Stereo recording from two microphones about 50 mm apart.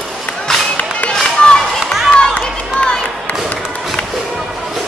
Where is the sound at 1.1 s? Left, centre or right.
Centre.